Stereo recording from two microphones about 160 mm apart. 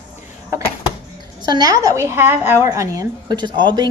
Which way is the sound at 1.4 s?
25° right (ahead or behind).